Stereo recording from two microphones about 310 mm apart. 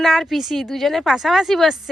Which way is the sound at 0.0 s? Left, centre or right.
Centre.